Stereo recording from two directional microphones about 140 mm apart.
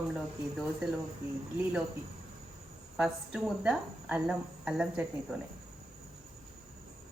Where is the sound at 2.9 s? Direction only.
5° right (ahead or behind).